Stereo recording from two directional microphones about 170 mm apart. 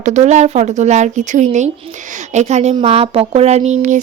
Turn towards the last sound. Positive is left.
turn(degrees=-40)  # may be behind; listen again after turning